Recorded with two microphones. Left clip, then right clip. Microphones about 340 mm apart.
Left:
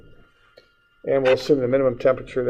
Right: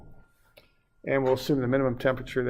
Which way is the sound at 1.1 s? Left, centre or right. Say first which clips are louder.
Left 7 dB; right.